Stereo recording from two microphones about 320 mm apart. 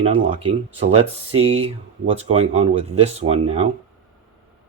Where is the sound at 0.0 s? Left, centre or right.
Centre.